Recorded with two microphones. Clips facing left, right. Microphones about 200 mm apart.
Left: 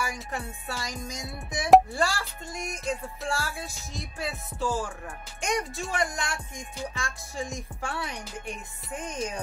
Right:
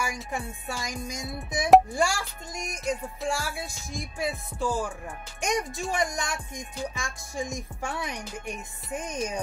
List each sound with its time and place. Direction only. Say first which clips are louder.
0.0 s music: right 1 dB; 15° right (ahead or behind)